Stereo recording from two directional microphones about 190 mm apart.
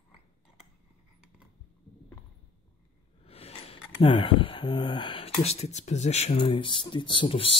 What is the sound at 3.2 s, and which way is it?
Speech, 30° left (ahead or behind).